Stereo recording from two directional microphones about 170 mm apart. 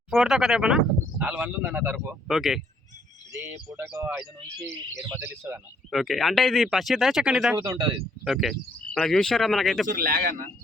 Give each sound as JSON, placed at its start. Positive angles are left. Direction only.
{"t": 0.1, "sound": "speech", "side_deg": 0}
{"t": 3.4, "sound": "speech", "side_deg": -15}
{"t": 5.1, "sound": "speech", "side_deg": -15}
{"t": 5.9, "sound": "speech", "side_deg": 0}
{"t": 7.6, "sound": "speech", "side_deg": -20}
{"t": 8.2, "sound": "speech", "side_deg": 0}
{"t": 9.8, "sound": "speech", "side_deg": -55}